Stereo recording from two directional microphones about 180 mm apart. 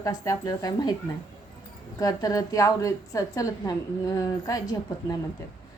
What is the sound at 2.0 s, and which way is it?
A woman's voice, 20° left (ahead or behind).